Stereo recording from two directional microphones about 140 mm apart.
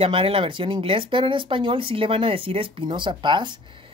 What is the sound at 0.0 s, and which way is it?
Speech, 40° right (ahead or behind).